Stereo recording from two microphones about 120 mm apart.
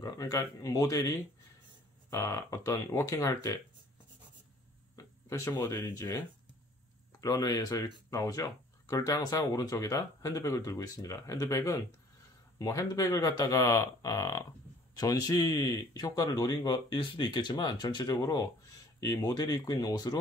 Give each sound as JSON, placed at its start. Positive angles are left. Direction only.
{"t": 0.0, "sound": "speech", "side_deg": 30}
{"t": 4.9, "sound": "speech", "side_deg": 30}